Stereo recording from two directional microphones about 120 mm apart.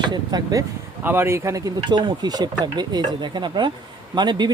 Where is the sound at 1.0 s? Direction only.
20° right (ahead or behind).